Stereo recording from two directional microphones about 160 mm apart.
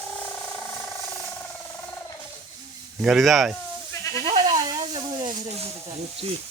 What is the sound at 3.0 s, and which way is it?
Speech, centre (ahead or behind).